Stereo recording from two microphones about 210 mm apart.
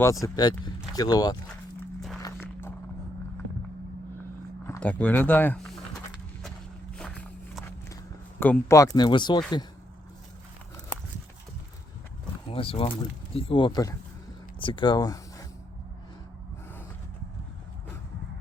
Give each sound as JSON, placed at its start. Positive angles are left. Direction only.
{"t": 0.0, "sound": "speech", "side_deg": 15}
{"t": 4.6, "sound": "speech", "side_deg": 10}
{"t": 6.9, "sound": "walk", "side_deg": 5}
{"t": 8.4, "sound": "speech", "side_deg": 10}
{"t": 12.5, "sound": "speech", "side_deg": 25}